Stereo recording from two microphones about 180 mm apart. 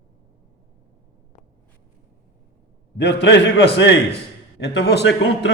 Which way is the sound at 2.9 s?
70° left (ahead or behind).